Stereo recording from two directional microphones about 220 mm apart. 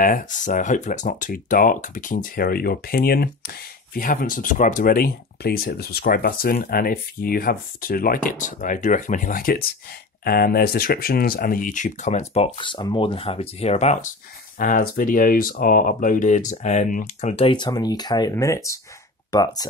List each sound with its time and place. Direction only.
0.0 s speech: 35° left (ahead or behind)
14.6 s speech: 40° left (ahead or behind); by 19.7 s 15° left (ahead or behind)